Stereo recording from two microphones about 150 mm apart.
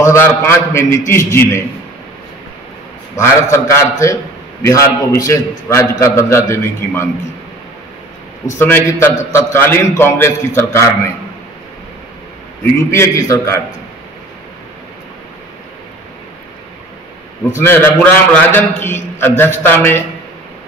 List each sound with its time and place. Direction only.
0.0 s a man's voice: 15° left (ahead or behind)
3.2 s a man's voice: 15° left (ahead or behind)
8.5 s a man's voice: 15° left (ahead or behind)
12.9 s a man's voice: 20° left (ahead or behind)
17.6 s a man's voice: 15° left (ahead or behind)